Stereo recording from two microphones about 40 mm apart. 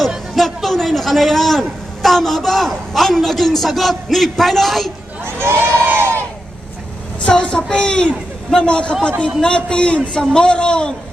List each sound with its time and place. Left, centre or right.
0.3 s a man's voice: centre
5.2 s speech: right
7.3 s a man's voice: left